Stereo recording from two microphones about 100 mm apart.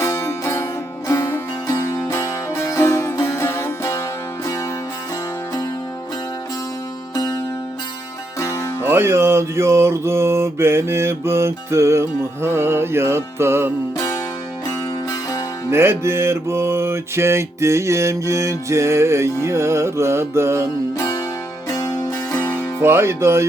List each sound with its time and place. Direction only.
0.0 s music: 30° left (ahead or behind)
8.4 s music: 30° left (ahead or behind)
8.8 s music: 25° right (ahead or behind)
15.1 s music: 35° left (ahead or behind)
15.7 s music: 25° right (ahead or behind)
21.0 s music: 35° left (ahead or behind)
22.5 s music: 25° right (ahead or behind)